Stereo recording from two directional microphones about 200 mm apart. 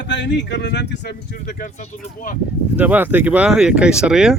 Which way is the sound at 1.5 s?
40° left (ahead or behind).